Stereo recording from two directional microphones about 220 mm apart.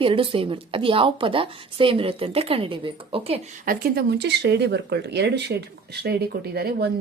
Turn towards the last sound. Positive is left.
turn(degrees=-45)  # may be behind; listen again after turning